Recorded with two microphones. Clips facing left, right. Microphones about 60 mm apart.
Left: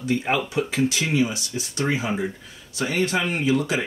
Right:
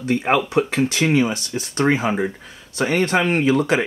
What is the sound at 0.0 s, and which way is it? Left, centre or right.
Speech, right.